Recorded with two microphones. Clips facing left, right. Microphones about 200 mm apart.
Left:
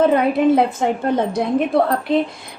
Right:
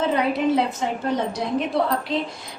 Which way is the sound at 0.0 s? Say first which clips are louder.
Left 6 dB; 55° left (ahead or behind).